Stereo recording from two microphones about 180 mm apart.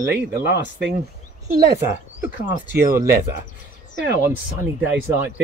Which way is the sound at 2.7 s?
15° right (ahead or behind).